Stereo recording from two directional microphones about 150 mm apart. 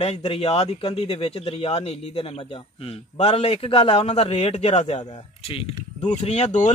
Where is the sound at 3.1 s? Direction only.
45° left (ahead or behind).